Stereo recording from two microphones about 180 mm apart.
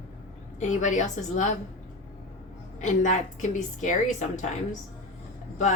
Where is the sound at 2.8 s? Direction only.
45° left (ahead or behind).